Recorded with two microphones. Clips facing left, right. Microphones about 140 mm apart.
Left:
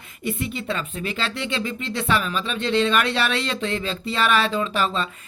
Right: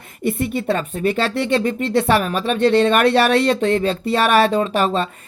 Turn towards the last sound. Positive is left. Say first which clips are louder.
# right 6 dB
turn(degrees=-50)  # may be behind; listen again after turning